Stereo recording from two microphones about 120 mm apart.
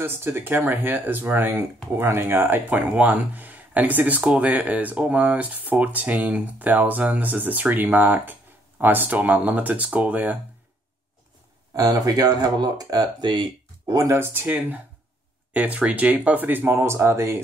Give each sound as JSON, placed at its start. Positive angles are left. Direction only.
{"t": 0.0, "sound": "speech", "side_deg": -20}
{"t": 11.7, "sound": "speech", "side_deg": -30}
{"t": 13.8, "sound": "speech", "side_deg": -25}